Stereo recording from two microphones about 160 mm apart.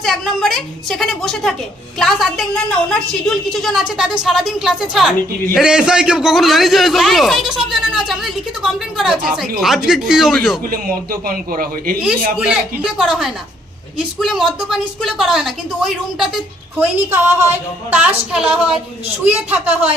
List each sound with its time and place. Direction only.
0.0 s a man's voice: centre (ahead or behind)
10.7 s a man's voice: 65° right (ahead or behind)
12.8 s a man's voice: 5° right (ahead or behind)
16.7 s a woman's voice: 15° right (ahead or behind)